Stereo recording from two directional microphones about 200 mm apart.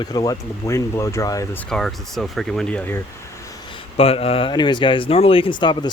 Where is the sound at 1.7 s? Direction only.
Centre (ahead or behind).